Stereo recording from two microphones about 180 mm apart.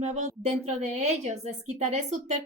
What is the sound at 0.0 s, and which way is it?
A woman's voice, 40° right (ahead or behind).